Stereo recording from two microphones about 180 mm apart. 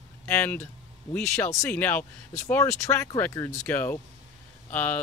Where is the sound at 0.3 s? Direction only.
10° left (ahead or behind).